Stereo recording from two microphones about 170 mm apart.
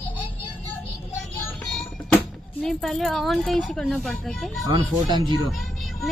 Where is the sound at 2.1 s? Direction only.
5° left (ahead or behind).